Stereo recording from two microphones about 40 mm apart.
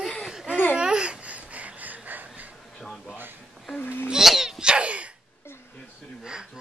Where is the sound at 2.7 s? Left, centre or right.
Centre.